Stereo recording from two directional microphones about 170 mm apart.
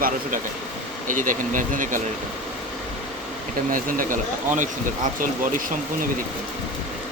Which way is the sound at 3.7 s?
55° right (ahead or behind).